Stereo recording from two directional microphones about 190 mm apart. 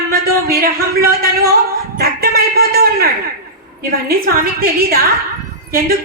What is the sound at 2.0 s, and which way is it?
A man's voice, 55° right (ahead or behind).